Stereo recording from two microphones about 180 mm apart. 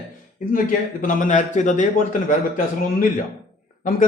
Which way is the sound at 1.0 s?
45° left (ahead or behind).